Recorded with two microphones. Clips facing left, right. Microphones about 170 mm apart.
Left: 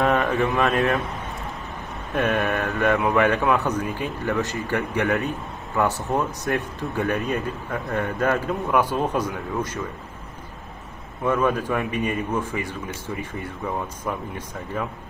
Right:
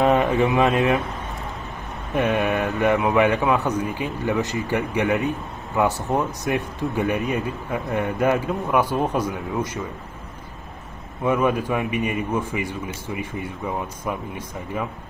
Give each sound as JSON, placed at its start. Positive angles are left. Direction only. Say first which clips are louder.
{"t": 0.1, "sound": "speech", "louder": "right 3 dB", "side_deg": -20}
{"t": 2.1, "sound": "a man's voice", "louder": "right 2 dB", "side_deg": -15}
{"t": 11.2, "sound": "a man's voice", "louder": "right 1 dB", "side_deg": -10}